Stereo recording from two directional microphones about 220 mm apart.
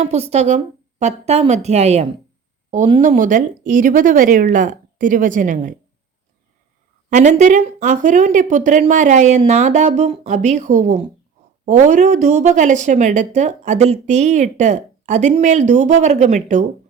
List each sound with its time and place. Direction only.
0.0 s speech: 30° right (ahead or behind)
7.1 s speech: 35° right (ahead or behind)